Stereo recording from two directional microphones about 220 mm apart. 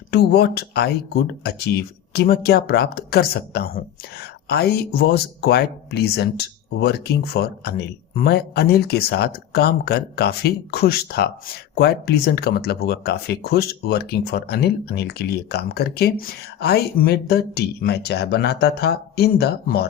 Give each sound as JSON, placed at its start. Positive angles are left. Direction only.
{"t": 0.1, "sound": "speech", "side_deg": 45}